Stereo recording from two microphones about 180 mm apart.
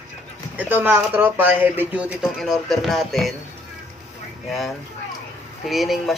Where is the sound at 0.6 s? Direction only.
10° right (ahead or behind).